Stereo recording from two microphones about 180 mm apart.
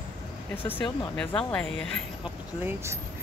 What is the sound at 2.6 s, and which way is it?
Speech, 10° right (ahead or behind).